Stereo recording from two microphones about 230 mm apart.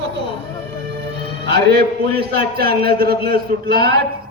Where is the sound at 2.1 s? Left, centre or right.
Right.